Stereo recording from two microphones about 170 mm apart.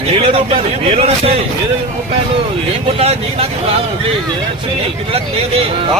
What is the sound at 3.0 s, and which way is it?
Speech, 35° right (ahead or behind).